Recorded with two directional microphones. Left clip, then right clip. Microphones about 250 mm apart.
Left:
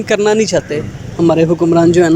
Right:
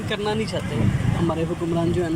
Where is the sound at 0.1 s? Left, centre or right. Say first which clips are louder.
Left 14 dB; left.